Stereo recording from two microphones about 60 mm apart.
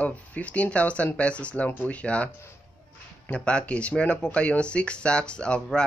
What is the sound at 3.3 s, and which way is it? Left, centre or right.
Speech, centre.